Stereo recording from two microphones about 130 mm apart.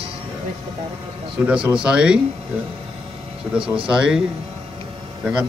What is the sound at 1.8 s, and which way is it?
Speech, 5° right (ahead or behind).